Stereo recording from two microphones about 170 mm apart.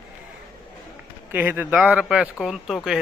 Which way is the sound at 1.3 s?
10° right (ahead or behind).